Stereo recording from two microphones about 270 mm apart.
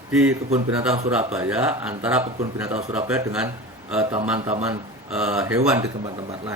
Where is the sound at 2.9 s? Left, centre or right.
Centre.